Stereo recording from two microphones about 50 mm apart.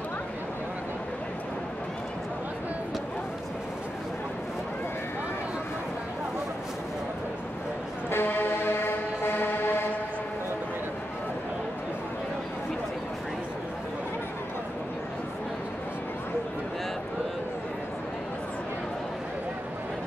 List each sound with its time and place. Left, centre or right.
8.1 s music: left